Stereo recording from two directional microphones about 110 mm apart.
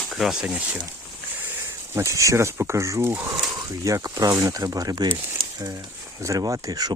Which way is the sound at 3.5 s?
30° right (ahead or behind).